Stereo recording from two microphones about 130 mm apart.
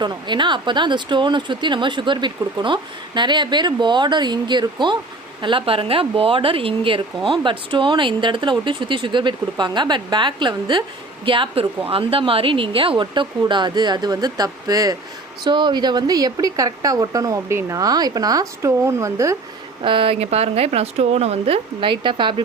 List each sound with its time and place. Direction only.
0.0 s a woman's voice: 35° right (ahead or behind)
19.8 s a woman's voice: 40° right (ahead or behind)